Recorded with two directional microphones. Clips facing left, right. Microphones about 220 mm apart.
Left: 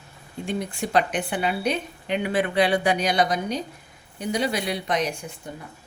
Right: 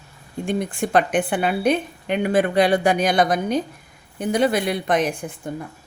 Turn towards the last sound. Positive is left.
turn(degrees=-50)  # may be behind; listen again after turning